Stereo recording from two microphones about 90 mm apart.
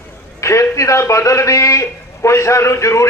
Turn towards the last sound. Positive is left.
turn(degrees=30)  # may be behind; listen again after turning